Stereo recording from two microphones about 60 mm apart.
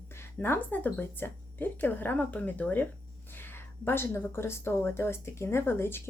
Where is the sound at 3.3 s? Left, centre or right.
Left.